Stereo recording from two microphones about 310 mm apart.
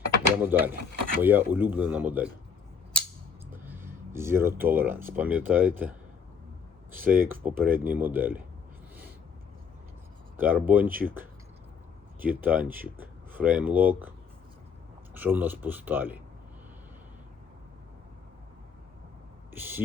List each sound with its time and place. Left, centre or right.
0.4 s speech: centre
3.5 s speech: centre
6.9 s speech: centre
10.3 s speech: centre
15.1 s speech: centre
19.5 s speech: centre